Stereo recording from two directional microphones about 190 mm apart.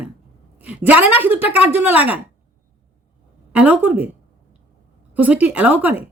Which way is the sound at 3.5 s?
5° right (ahead or behind).